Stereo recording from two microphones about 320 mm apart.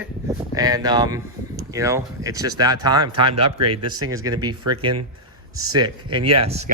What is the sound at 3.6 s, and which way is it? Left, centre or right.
Speech, right.